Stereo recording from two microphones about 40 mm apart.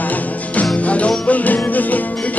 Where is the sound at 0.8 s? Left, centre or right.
Left.